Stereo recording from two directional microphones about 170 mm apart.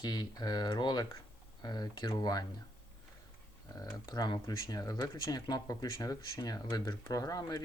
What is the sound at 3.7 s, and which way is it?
Speech, 20° left (ahead or behind).